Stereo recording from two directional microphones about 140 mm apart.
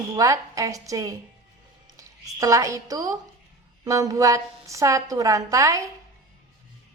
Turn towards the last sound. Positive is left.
turn(degrees=-20)  # may be behind; listen again after turning